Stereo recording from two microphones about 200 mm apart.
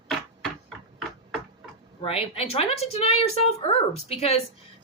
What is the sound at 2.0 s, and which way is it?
A woman's voice, 30° left (ahead or behind).